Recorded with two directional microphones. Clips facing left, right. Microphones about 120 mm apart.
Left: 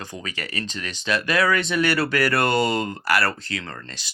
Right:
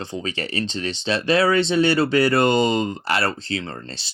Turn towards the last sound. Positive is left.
turn(degrees=-30)  # may be behind; listen again after turning